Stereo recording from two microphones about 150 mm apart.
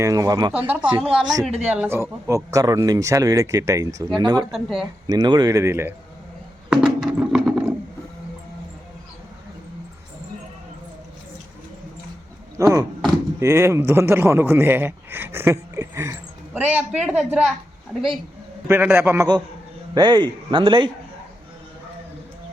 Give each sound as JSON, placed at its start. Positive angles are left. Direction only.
{"t": 0.0, "sound": "speech", "side_deg": -25}
{"t": 0.5, "sound": "a woman's voice", "side_deg": -10}
{"t": 4.5, "sound": "a woman's voice", "side_deg": 0}
{"t": 5.0, "sound": "speech", "side_deg": -25}
{"t": 6.7, "sound": "a sound", "side_deg": -5}
{"t": 12.5, "sound": "speech", "side_deg": -20}
{"t": 16.7, "sound": "a woman's voice", "side_deg": -5}
{"t": 18.7, "sound": "speech", "side_deg": -15}
{"t": 19.9, "sound": "a man's voice", "side_deg": -30}